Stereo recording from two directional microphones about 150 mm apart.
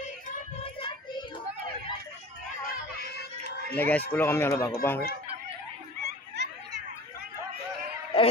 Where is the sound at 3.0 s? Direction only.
90° left.